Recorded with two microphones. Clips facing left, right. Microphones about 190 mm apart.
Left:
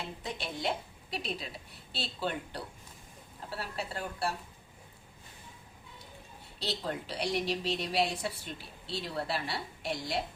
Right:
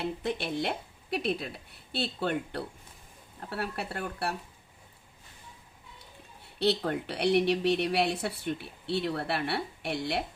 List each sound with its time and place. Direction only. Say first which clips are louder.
0.0 s a woman's voice: right 7 dB; 60° right (ahead or behind)
6.6 s a woman's voice: right 8 dB; 60° right (ahead or behind)